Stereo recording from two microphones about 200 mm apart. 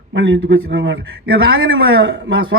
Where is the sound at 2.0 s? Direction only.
65° right (ahead or behind).